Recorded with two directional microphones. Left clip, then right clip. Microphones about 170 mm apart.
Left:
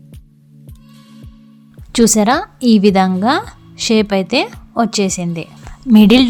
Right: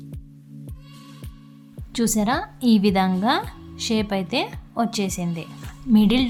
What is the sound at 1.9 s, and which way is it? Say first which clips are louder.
A woman's voice: left 11 dB; 45° left (ahead or behind).